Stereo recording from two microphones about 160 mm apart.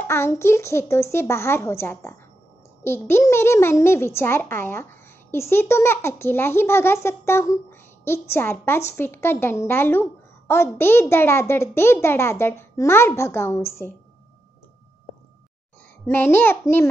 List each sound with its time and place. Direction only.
0.0 s a child's voice: 15° left (ahead or behind)
16.1 s a child's voice: 15° left (ahead or behind)